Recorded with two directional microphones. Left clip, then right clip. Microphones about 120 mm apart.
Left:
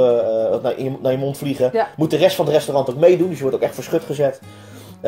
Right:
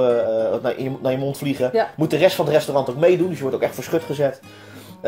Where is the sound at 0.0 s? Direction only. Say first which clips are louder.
Left 2 dB; 15° left (ahead or behind).